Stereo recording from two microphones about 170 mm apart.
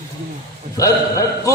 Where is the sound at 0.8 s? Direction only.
20° left (ahead or behind).